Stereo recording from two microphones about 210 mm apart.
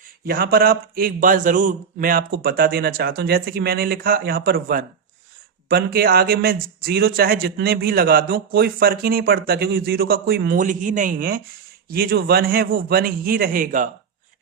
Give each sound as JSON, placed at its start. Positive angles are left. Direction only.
{"t": 0.3, "sound": "speech", "side_deg": -45}